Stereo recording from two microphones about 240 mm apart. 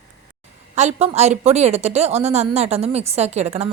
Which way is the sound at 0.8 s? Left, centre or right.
Right.